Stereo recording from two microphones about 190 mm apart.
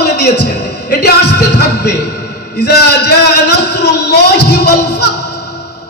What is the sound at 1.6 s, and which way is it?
Music, 60° left (ahead or behind).